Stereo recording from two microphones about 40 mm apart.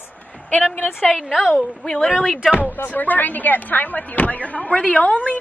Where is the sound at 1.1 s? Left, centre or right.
Centre.